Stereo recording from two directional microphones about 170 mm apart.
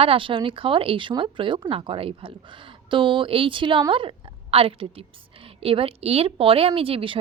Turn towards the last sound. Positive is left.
turn(degrees=-35)  # may be behind; listen again after turning